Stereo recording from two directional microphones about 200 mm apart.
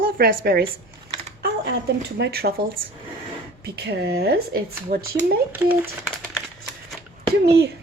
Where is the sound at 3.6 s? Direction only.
55° right (ahead or behind).